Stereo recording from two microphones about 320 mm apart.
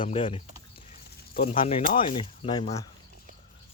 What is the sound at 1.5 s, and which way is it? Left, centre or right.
Speech, centre.